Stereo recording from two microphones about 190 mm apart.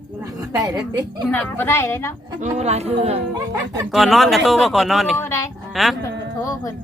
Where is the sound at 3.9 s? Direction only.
Centre (ahead or behind).